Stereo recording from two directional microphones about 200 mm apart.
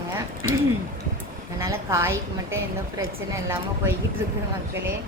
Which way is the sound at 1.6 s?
15° right (ahead or behind).